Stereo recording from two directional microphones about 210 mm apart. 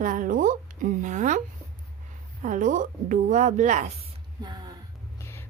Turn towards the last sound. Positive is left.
turn(degrees=10)  # may be behind; listen again after turning